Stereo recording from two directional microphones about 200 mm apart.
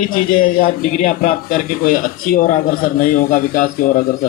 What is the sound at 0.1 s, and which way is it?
A man's voice, 45° left (ahead or behind).